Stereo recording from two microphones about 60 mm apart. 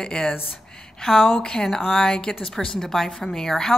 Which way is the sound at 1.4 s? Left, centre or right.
Centre.